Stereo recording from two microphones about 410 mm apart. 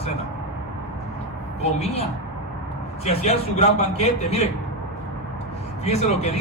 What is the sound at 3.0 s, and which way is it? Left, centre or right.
Speech, centre.